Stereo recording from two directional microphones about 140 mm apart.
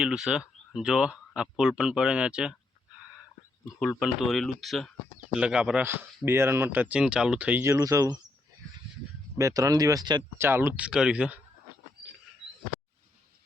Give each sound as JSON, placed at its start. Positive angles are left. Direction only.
{"t": 0.0, "sound": "speech", "side_deg": -5}
{"t": 4.0, "sound": "speech", "side_deg": 0}
{"t": 5.8, "sound": "speech", "side_deg": -15}
{"t": 9.4, "sound": "speech", "side_deg": -25}
{"t": 10.3, "sound": "speech", "side_deg": -15}